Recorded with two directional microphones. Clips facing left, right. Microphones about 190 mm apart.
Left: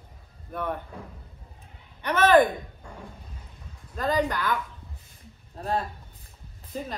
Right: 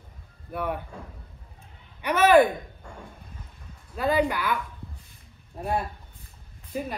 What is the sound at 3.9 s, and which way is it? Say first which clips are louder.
Speech: right 2 dB; 10° right (ahead or behind).